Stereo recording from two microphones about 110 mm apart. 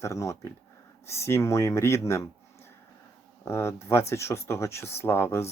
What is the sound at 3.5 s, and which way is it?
Speech, 25° left (ahead or behind).